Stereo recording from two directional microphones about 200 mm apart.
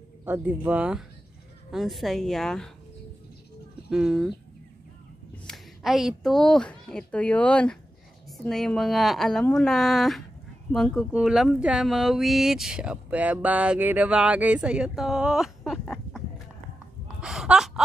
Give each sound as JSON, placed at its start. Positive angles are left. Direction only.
{"t": 0.2, "sound": "speech", "side_deg": -10}
{"t": 3.9, "sound": "speech", "side_deg": -5}
{"t": 5.5, "sound": "a woman's voice", "side_deg": 0}
{"t": 17.2, "sound": "gasp", "side_deg": -5}